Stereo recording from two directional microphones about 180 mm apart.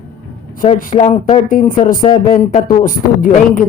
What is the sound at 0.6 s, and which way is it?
Speech, 40° left (ahead or behind).